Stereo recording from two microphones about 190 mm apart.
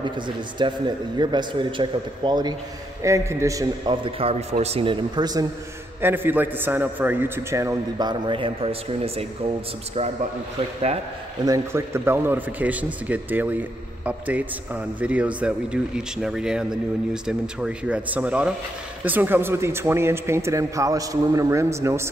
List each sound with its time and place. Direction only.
0.6 s a man's voice: 25° right (ahead or behind)
5.9 s a man's voice: 10° right (ahead or behind); by 9.2 s 30° right (ahead or behind)
11.4 s a man's voice: 15° right (ahead or behind)